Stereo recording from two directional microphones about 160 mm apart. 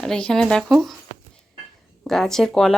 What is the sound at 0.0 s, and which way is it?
Speech, 5° left (ahead or behind).